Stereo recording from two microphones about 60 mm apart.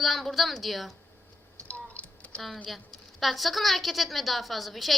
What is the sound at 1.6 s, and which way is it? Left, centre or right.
Typing, left.